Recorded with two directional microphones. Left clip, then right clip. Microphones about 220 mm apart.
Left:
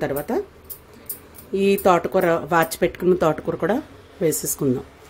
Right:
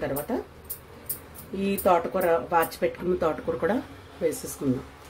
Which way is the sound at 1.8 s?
50° left (ahead or behind).